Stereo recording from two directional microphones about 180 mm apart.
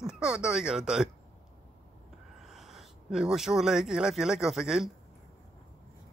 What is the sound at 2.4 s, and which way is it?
Speech, centre (ahead or behind).